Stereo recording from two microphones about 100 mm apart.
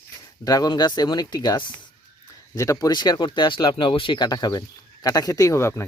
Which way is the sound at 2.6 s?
35° left (ahead or behind).